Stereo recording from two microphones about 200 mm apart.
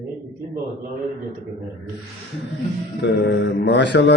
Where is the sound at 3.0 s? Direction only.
60° left (ahead or behind).